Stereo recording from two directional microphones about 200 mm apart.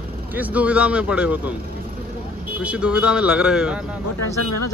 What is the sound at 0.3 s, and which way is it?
Speech, 10° right (ahead or behind).